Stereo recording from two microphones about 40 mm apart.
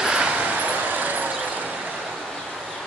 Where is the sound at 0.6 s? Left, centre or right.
Right.